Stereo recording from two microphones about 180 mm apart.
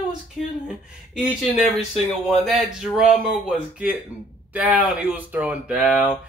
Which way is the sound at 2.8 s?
5° right (ahead or behind).